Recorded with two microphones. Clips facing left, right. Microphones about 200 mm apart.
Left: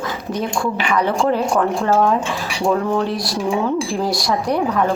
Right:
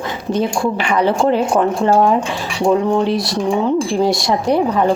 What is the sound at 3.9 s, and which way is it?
Speech, 25° right (ahead or behind).